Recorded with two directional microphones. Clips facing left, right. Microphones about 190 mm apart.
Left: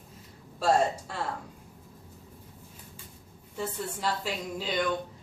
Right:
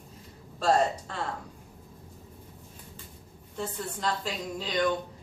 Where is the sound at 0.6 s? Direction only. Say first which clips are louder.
Even; 10° left (ahead or behind).